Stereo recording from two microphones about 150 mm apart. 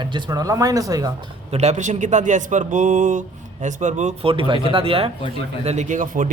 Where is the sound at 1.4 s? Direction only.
45° right (ahead or behind).